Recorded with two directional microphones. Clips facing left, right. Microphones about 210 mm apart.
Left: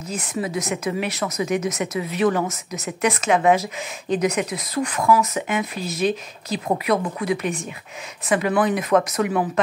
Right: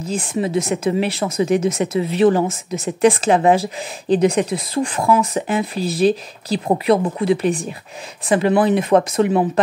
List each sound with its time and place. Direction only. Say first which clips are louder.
0.0 s speech: right 5 dB; 30° right (ahead or behind)